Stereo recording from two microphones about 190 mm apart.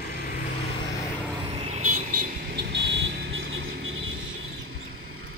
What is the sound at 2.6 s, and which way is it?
Vehicle, 65° right (ahead or behind).